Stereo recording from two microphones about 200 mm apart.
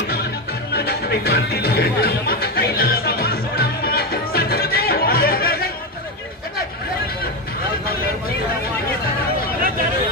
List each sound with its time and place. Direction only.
0.7 s music: 50° left (ahead or behind)